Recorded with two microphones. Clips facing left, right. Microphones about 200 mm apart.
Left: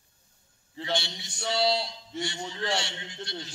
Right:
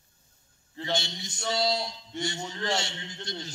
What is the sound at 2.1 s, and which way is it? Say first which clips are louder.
Speech: right 1 dB; centre (ahead or behind).